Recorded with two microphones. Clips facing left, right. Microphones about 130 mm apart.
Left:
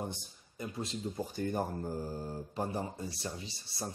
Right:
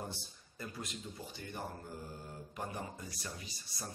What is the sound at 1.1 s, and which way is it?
Mantra, 45° left (ahead or behind).